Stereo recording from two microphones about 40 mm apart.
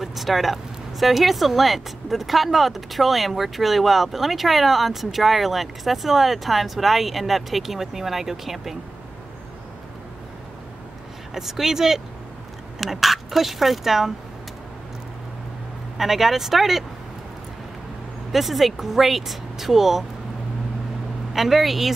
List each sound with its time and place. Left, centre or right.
0.0 s speech: centre
11.3 s speech: centre
16.0 s speech: centre
18.3 s speech: centre
21.3 s speech: centre